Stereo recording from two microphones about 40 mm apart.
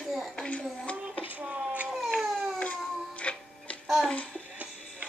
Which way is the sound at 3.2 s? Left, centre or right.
Left.